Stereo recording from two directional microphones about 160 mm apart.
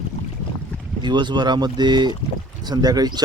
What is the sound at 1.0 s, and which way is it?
Speech, 30° right (ahead or behind).